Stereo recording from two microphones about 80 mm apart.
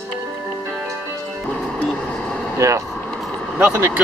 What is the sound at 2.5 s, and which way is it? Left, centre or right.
Speech, right.